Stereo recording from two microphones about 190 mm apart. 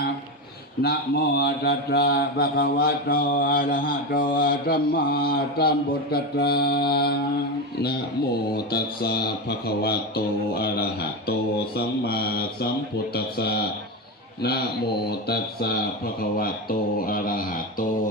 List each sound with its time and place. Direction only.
0.8 s mantra: 60° left (ahead or behind)
8.5 s mantra: 55° left (ahead or behind)
15.1 s mantra: 55° left (ahead or behind)
16.4 s speech: 50° left (ahead or behind)